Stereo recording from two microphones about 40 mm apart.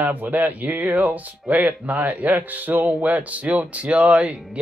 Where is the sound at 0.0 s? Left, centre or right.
Right.